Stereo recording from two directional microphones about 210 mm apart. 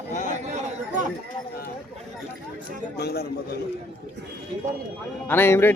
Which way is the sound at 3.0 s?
50° left (ahead or behind).